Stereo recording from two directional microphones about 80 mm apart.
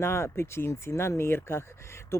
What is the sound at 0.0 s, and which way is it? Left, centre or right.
Speech, left.